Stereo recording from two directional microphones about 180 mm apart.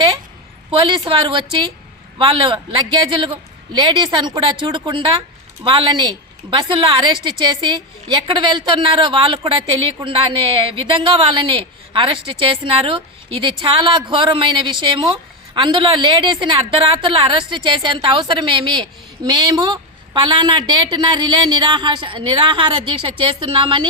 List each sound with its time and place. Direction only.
0.7 s a woman's voice: 30° right (ahead or behind)